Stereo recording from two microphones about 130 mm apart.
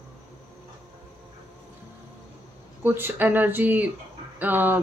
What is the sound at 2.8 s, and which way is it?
Speech, 15° right (ahead or behind).